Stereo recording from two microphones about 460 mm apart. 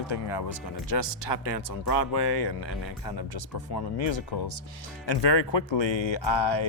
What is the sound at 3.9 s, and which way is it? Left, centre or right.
Speech, left.